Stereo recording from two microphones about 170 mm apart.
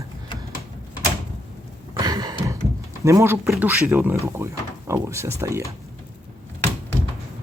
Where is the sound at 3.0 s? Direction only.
20° right (ahead or behind).